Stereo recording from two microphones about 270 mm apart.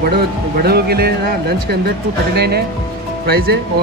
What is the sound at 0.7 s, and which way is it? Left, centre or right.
Speech, right.